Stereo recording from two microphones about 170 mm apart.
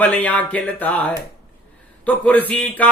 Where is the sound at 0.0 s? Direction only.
5° left (ahead or behind).